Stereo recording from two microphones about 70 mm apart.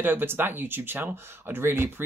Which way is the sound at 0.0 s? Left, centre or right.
Right.